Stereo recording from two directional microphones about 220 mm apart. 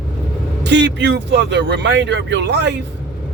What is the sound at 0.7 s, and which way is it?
A man's voice, 55° right (ahead or behind).